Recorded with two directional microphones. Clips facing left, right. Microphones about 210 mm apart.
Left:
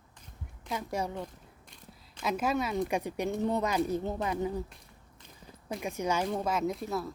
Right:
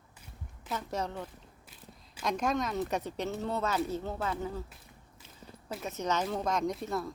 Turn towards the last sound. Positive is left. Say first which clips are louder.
# left 1 dB
turn(degrees=0)  # may be behind; listen again after turning